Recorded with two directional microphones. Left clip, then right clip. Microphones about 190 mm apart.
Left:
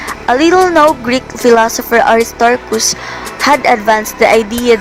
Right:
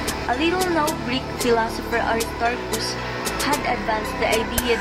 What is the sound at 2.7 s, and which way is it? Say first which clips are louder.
Speech: left 12 dB; centre (ahead or behind).